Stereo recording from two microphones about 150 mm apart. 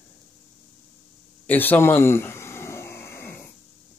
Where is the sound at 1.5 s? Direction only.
10° left (ahead or behind).